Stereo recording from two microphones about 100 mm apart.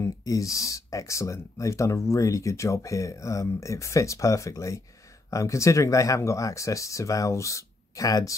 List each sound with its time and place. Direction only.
0.0 s speech: 35° left (ahead or behind)